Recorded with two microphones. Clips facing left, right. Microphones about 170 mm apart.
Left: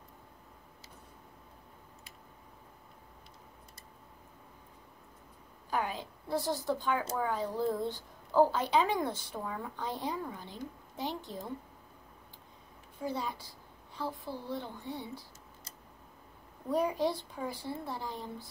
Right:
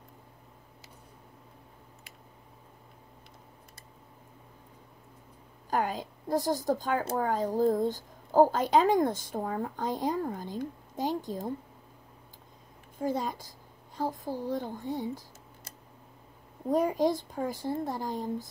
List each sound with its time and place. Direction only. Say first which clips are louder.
5.7 s a woman's voice: right 4 dB; 45° right (ahead or behind)
13.0 s speech: right 5 dB; 45° right (ahead or behind)
16.6 s speech: right 4 dB; 45° right (ahead or behind)